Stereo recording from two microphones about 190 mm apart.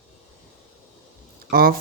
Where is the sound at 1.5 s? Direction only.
50° right (ahead or behind).